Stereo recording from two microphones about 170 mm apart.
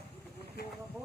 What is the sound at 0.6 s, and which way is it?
Vehicle, 65° left (ahead or behind).